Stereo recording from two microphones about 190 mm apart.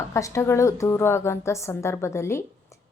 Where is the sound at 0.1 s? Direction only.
15° left (ahead or behind).